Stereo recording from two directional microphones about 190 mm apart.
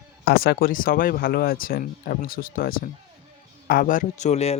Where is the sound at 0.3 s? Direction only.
50° left (ahead or behind).